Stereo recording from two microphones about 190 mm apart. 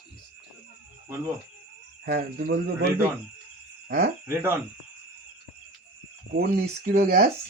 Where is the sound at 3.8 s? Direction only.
60° right (ahead or behind).